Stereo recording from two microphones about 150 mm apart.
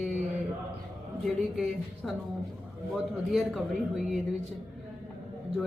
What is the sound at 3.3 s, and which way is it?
Speech, centre (ahead or behind).